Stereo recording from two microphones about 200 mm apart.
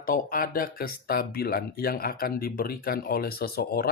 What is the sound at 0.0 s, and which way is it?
Speech, 45° left (ahead or behind).